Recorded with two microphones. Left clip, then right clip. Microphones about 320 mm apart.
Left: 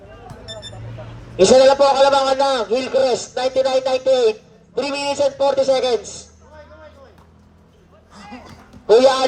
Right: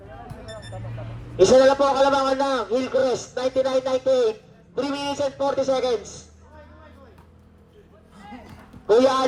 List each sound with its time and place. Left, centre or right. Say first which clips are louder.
1.4 s a man's voice: left 4 dB; left
8.1 s music: left 4 dB; centre
8.9 s a man's voice: left 5 dB; left